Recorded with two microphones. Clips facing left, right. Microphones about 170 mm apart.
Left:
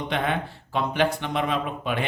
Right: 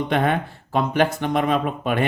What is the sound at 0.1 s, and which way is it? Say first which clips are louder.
Speech: right 4 dB; 45° right (ahead or behind).